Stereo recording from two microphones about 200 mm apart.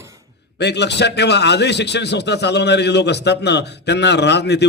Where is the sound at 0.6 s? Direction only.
60° left (ahead or behind).